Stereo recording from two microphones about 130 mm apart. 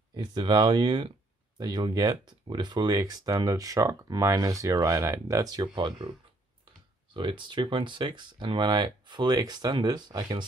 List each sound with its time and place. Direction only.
0.1 s speech: 35° right (ahead or behind)
7.2 s speech: 40° right (ahead or behind)